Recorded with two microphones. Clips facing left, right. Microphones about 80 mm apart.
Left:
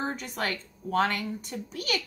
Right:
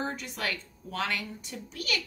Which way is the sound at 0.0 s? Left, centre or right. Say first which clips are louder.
Left 2 dB; left.